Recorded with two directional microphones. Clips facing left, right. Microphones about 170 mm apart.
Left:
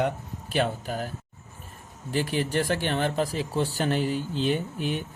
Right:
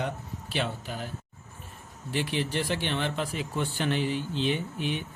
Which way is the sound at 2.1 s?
40° left (ahead or behind).